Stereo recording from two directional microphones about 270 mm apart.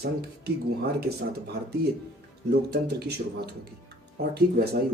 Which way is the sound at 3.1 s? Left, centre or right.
Right.